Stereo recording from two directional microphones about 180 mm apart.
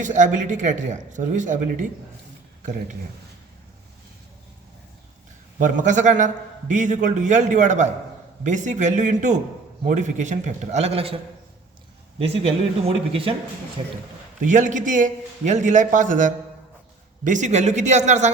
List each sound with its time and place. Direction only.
0.0 s a man's voice: 45° right (ahead or behind)
5.5 s a man's voice: 45° right (ahead or behind)
12.2 s a man's voice: 35° right (ahead or behind)
14.4 s a man's voice: 45° right (ahead or behind)